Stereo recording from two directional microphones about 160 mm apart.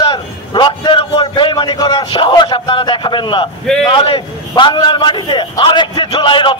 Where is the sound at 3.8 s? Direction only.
30° left (ahead or behind).